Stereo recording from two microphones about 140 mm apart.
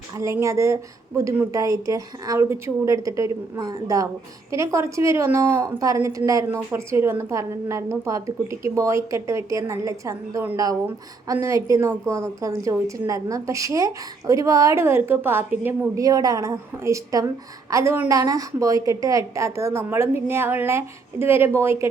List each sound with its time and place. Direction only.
0.2 s a woman's voice: 20° right (ahead or behind)